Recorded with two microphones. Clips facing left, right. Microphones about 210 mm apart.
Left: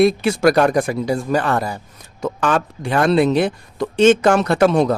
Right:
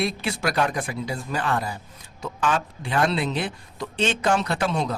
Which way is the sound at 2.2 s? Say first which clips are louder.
Left 6 dB; 55° left (ahead or behind).